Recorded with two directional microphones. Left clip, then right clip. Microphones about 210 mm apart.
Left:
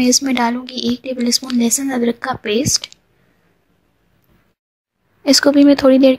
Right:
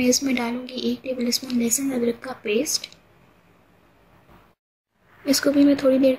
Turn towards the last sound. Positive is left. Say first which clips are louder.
# left 8 dB
turn(degrees=40)  # may be behind; listen again after turning